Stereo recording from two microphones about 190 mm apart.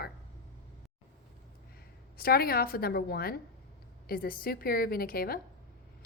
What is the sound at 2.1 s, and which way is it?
A woman's voice, 55° left (ahead or behind).